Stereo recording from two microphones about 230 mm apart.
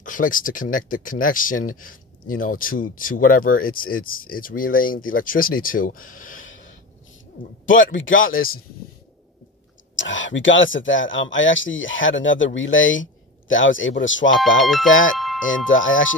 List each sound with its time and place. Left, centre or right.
0.0 s speech: left
7.6 s speech: left
9.9 s speech: left
14.6 s speech: centre
14.9 s speech: left